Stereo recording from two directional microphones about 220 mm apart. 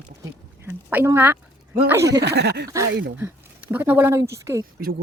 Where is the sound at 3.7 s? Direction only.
10° right (ahead or behind).